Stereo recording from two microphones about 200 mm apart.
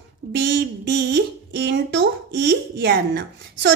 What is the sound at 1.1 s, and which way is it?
A woman's voice, 55° right (ahead or behind).